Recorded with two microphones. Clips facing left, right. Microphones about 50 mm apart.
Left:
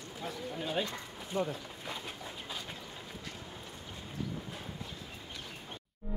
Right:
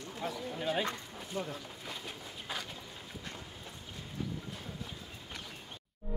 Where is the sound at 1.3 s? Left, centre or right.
Left.